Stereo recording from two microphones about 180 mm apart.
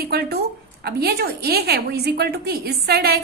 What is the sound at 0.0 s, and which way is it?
A woman's voice, 60° right (ahead or behind).